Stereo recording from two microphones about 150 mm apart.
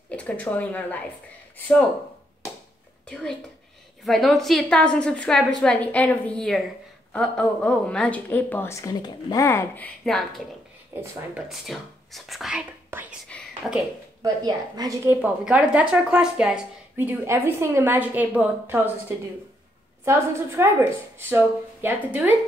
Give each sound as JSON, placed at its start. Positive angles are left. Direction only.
{"t": 0.1, "sound": "speech", "side_deg": 10}
{"t": 3.1, "sound": "a woman's voice", "side_deg": 5}
{"t": 10.0, "sound": "a woman's voice", "side_deg": 0}
{"t": 12.9, "sound": "speech", "side_deg": -15}
{"t": 13.3, "sound": "speech", "side_deg": 10}
{"t": 14.2, "sound": "a woman's voice", "side_deg": -25}
{"t": 15.0, "sound": "speech", "side_deg": -5}